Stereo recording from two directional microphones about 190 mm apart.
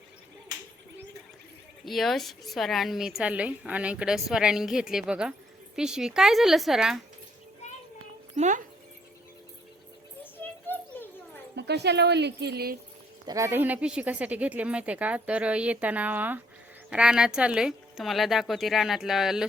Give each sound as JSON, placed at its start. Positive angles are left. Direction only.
{"t": 1.8, "sound": "a woman's voice", "side_deg": 0}
{"t": 8.4, "sound": "speech", "side_deg": -40}
{"t": 10.4, "sound": "a sound", "side_deg": 10}
{"t": 11.5, "sound": "speech", "side_deg": -60}
{"t": 13.2, "sound": "a woman's voice", "side_deg": -15}